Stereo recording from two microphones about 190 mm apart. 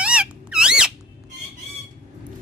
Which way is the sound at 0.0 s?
5° right (ahead or behind).